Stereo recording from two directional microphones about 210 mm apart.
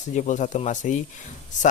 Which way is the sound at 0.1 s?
35° left (ahead or behind).